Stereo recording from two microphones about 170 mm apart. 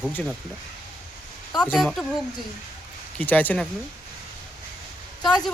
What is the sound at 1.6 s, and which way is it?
Speech, 5° left (ahead or behind).